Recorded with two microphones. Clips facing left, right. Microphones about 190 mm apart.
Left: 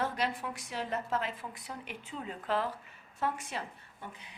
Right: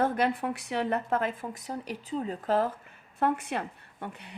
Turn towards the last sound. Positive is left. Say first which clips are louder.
# right 7 dB
turn(degrees=-65)  # may be behind; listen again after turning